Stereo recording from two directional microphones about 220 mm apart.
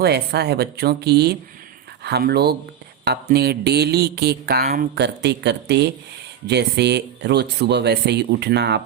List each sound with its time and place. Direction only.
0.0 s speech: 50° right (ahead or behind)